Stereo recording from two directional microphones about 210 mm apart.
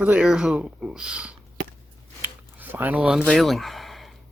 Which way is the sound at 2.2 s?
10° right (ahead or behind).